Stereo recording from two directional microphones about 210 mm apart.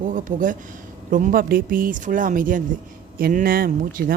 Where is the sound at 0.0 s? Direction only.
40° right (ahead or behind).